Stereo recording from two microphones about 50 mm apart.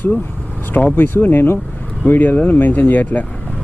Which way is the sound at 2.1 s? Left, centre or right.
Left.